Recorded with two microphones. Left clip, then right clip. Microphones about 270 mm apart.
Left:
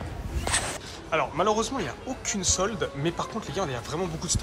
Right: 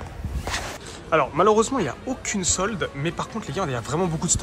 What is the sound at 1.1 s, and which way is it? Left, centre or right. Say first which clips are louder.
Speech: right 6 dB; centre.